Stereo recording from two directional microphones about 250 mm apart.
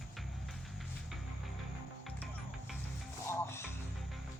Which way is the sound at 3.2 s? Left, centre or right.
Centre.